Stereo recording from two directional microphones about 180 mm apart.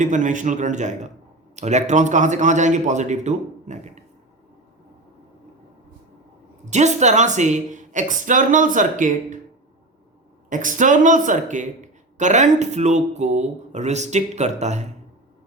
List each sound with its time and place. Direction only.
0.0 s speech: 45° right (ahead or behind)
6.7 s speech: 40° right (ahead or behind)
10.5 s speech: 45° right (ahead or behind)